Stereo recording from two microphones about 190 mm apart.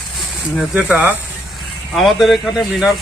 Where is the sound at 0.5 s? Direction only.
5° right (ahead or behind).